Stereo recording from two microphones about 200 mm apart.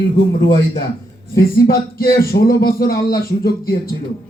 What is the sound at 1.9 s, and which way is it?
Speech, 45° left (ahead or behind).